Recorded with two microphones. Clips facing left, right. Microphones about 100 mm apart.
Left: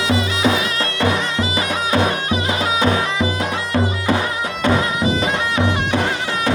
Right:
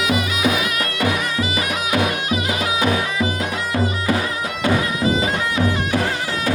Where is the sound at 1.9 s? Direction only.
35° left (ahead or behind).